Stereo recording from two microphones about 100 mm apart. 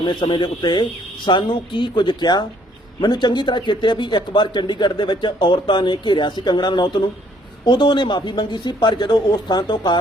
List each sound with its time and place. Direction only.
0.0 s speech: 50° left (ahead or behind)